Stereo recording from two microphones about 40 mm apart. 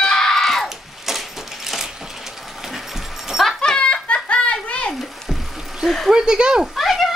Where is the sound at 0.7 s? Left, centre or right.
Centre.